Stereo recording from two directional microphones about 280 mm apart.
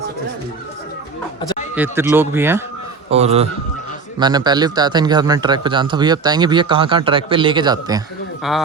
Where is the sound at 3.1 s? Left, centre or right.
Right.